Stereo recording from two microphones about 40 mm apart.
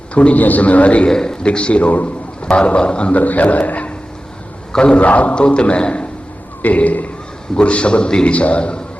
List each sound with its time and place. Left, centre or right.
0.1 s a man's voice: left
0.3 s a man's voice: left
1.0 s a man's voice: centre
1.5 s a man's voice: left
2.4 s a man's voice: left
3.2 s a man's voice: left
4.7 s a man's voice: left
4.9 s a man's voice: left
5.3 s a man's voice: left
6.6 s a man's voice: left
7.5 s a man's voice: left